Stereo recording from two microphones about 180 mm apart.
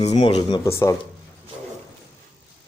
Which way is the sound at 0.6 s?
15° left (ahead or behind).